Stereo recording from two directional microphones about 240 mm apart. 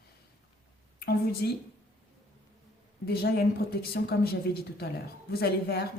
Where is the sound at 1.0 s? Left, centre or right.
Left.